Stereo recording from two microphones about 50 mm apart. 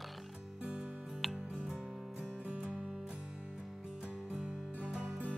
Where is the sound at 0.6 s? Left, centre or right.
Right.